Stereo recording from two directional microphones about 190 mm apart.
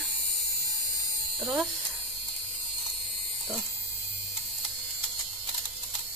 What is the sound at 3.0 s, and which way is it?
Electric shaver, centre (ahead or behind).